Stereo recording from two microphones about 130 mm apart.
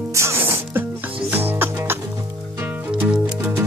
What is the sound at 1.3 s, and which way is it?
Music, 15° right (ahead or behind).